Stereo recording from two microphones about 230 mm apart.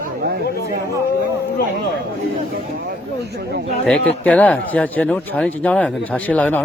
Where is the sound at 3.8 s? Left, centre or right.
Centre.